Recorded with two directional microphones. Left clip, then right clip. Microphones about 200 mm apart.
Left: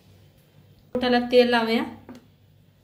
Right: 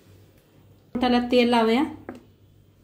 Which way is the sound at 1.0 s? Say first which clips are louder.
Left 2 dB; 40° right (ahead or behind).